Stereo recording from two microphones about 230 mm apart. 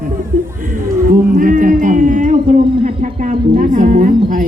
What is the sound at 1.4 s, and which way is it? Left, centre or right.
Music, right.